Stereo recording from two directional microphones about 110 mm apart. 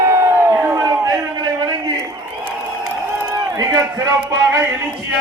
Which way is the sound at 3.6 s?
35° right (ahead or behind).